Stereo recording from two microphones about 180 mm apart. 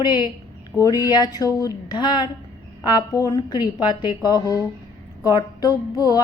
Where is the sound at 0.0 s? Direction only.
25° left (ahead or behind).